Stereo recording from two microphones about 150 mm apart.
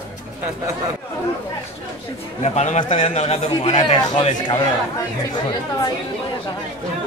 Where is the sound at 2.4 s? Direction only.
50° left (ahead or behind).